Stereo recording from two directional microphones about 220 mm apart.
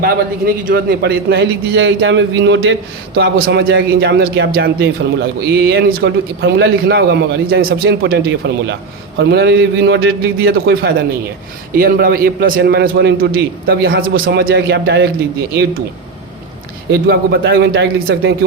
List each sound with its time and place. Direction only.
0.0 s a man's voice: 45° right (ahead or behind)
3.3 s a man's voice: 45° right (ahead or behind)
16.9 s a man's voice: 45° right (ahead or behind)